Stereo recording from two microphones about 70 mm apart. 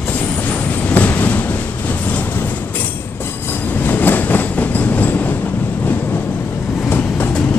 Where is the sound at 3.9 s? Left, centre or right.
Left.